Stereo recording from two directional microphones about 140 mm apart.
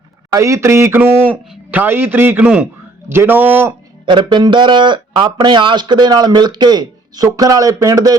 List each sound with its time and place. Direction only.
0.3 s a sound: 20° right (ahead or behind)
1.3 s a man's voice: 15° right (ahead or behind)
4.0 s speech: 35° right (ahead or behind)